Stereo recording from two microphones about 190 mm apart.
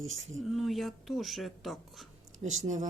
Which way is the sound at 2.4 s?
40° right (ahead or behind).